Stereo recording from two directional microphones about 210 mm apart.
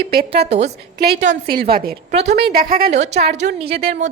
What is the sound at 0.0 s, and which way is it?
Speech, 50° right (ahead or behind).